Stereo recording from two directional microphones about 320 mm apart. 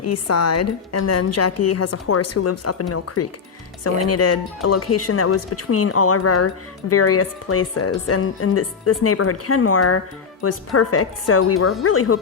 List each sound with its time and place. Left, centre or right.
0.0 s a woman's voice: left